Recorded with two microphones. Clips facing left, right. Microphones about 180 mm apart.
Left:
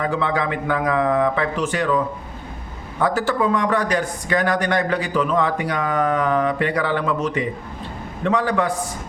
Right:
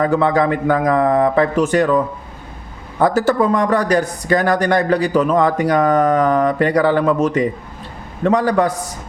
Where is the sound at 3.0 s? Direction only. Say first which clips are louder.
Right 5 dB; 40° right (ahead or behind).